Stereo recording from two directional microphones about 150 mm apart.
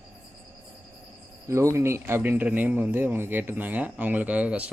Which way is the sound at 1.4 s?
20° right (ahead or behind).